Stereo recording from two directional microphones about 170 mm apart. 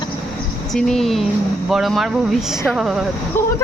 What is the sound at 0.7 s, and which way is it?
Speech, centre (ahead or behind).